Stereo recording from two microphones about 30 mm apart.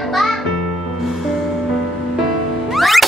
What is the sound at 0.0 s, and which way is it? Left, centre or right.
Music, centre.